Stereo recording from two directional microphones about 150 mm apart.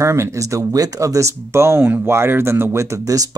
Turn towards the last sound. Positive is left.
turn(degrees=-25)  # may be behind; listen again after turning